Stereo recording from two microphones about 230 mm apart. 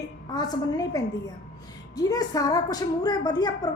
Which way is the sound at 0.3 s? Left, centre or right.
Centre.